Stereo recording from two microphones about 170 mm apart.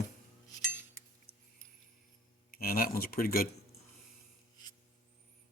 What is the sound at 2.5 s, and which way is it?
Speech, 60° left (ahead or behind).